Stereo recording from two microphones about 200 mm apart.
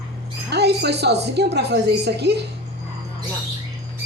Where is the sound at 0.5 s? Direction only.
55° right (ahead or behind).